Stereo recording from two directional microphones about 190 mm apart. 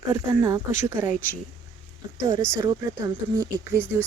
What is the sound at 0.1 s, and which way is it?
Speech, 20° right (ahead or behind).